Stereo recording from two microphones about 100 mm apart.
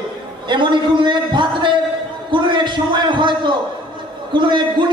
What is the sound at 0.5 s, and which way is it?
A man's voice, 50° right (ahead or behind).